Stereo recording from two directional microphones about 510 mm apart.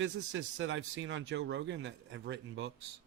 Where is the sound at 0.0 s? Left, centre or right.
Right.